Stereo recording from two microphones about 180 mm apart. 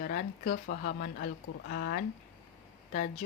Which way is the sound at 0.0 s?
55° left (ahead or behind).